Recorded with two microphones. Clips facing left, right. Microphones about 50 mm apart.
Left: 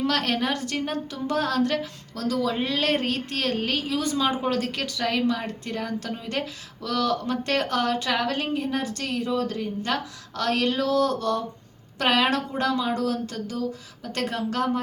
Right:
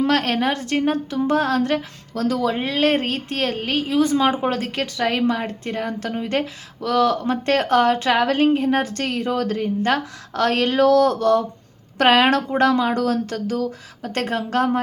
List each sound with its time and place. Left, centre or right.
0.0 s a woman's voice: right